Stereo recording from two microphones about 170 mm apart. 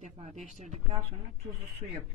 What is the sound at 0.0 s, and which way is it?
Speech, 45° right (ahead or behind).